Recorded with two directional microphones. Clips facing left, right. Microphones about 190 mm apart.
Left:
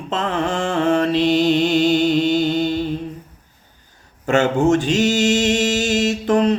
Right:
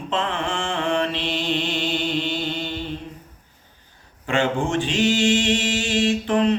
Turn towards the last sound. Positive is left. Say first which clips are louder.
# left 3 dB
turn(degrees=40)  # may be behind; listen again after turning